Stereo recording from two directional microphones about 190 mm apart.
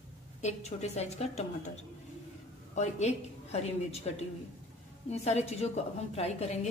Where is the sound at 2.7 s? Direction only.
35° left (ahead or behind).